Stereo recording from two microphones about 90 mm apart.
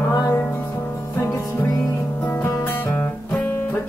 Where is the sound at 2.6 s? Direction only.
25° left (ahead or behind).